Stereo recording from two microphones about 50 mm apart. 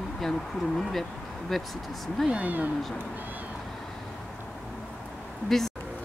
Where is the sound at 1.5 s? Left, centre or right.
Centre.